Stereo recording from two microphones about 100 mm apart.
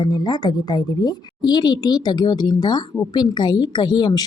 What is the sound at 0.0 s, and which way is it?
Speech, 45° left (ahead or behind).